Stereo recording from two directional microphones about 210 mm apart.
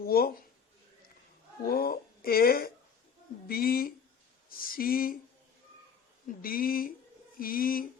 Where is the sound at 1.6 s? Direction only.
45° left (ahead or behind).